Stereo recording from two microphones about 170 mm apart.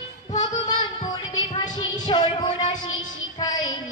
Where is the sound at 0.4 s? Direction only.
25° left (ahead or behind).